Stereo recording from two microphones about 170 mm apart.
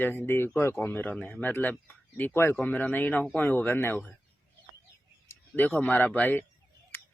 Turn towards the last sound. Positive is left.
turn(degrees=10)  # may be behind; listen again after turning